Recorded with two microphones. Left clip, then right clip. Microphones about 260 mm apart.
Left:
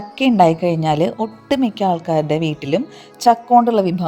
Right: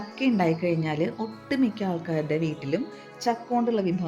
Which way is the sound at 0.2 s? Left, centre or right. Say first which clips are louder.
Left 12 dB; left.